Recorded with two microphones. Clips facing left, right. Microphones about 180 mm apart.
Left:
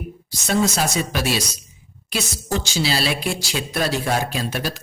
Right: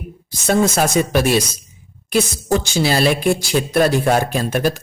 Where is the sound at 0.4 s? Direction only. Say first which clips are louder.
Right 5 dB; 50° right (ahead or behind).